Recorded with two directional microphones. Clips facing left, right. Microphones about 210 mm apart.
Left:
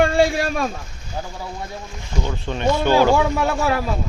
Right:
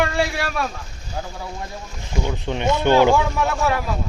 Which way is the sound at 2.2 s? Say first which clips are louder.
Left 1 dB; 15° right (ahead or behind).